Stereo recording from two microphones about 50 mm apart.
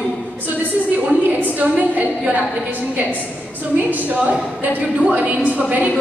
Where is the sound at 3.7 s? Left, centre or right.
Right.